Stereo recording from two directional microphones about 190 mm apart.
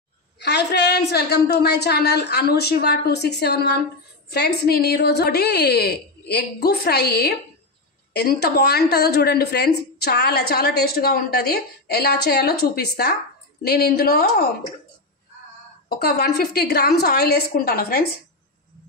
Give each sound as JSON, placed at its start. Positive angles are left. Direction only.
{"t": 0.4, "sound": "a woman's voice", "side_deg": 60}
{"t": 15.9, "sound": "a woman's voice", "side_deg": 55}